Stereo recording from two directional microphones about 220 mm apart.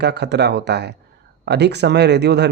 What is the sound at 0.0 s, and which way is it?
Speech, 50° right (ahead or behind).